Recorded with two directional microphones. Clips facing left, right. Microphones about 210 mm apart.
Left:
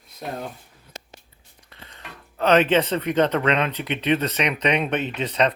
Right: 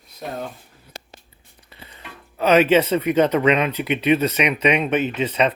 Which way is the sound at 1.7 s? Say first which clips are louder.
Right 1 dB; 5° right (ahead or behind).